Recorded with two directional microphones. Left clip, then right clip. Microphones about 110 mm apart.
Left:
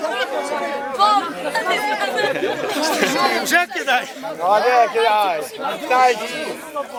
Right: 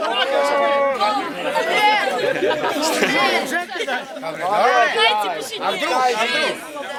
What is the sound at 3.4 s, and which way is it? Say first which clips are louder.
Chatter: left 5 dB; 45° left (ahead or behind).